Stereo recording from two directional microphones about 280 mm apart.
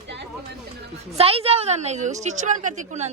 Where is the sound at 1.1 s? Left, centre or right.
Right.